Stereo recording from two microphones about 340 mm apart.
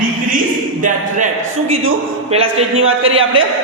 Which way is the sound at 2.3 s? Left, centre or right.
Centre.